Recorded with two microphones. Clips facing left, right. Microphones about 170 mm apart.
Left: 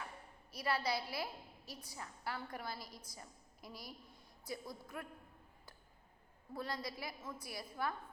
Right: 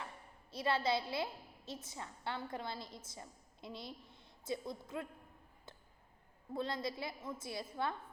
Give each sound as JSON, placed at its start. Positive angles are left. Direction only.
{"t": 0.5, "sound": "a woman's voice", "side_deg": -25}
{"t": 6.5, "sound": "a woman's voice", "side_deg": -25}